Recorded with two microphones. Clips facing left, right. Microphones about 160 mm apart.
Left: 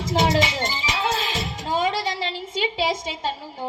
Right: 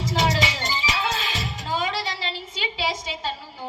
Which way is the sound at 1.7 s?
50° left (ahead or behind).